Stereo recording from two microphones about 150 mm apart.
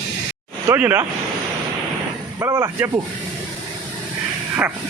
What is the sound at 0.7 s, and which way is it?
Speech, 15° right (ahead or behind).